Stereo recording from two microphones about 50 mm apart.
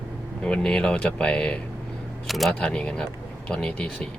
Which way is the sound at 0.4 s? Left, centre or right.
Centre.